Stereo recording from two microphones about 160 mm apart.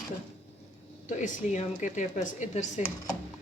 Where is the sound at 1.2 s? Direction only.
50° left (ahead or behind).